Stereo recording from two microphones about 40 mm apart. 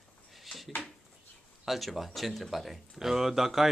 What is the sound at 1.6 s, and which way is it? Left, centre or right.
Speech, centre.